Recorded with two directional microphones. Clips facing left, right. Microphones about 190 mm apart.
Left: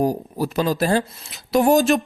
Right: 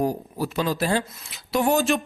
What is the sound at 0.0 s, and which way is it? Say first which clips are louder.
Speech: left 4 dB; 40° left (ahead or behind).